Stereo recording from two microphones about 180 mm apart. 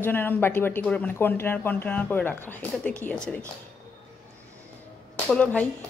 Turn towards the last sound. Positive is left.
turn(degrees=5)  # may be behind; listen again after turning